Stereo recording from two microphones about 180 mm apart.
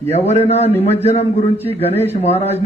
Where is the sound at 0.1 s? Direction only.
35° left (ahead or behind).